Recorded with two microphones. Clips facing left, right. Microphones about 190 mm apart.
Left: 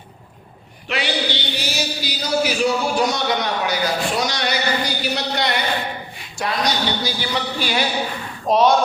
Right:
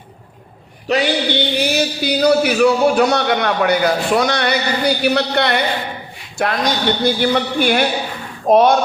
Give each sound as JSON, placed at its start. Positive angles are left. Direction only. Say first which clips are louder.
{"t": 0.9, "sound": "a man's voice", "louder": "right 7 dB", "side_deg": -45}